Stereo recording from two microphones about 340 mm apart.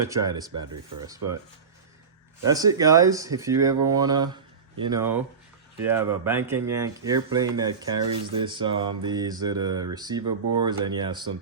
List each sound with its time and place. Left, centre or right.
0.1 s speech: centre
2.5 s speech: centre
10.4 s speech: right
10.7 s speech: centre